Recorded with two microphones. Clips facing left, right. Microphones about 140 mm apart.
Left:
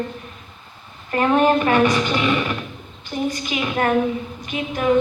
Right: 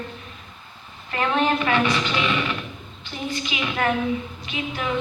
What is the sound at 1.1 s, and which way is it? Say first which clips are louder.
A woman's voice: left 6 dB; 40° left (ahead or behind).